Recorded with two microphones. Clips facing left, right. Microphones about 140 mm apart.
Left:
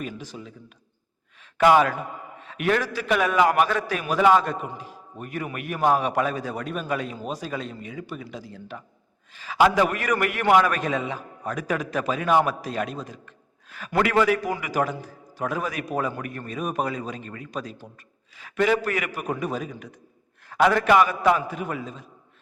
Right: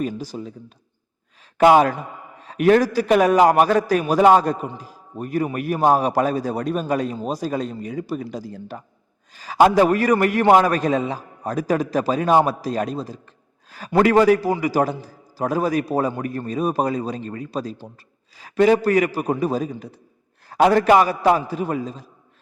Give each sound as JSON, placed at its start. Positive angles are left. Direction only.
{"t": 0.0, "sound": "a man's voice", "side_deg": -35}
{"t": 1.5, "sound": "a man's voice", "side_deg": -40}